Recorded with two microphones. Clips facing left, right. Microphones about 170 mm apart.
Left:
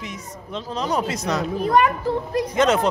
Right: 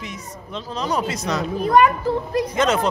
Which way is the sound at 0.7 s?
50° left (ahead or behind).